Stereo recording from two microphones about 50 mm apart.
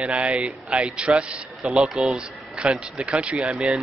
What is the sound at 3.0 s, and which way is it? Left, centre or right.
Speech, right.